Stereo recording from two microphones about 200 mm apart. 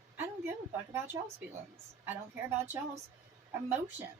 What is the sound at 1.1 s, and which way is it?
A woman's voice, 15° right (ahead or behind).